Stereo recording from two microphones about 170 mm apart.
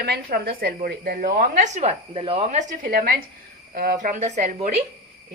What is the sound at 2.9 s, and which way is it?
A woman's voice, 60° right (ahead or behind).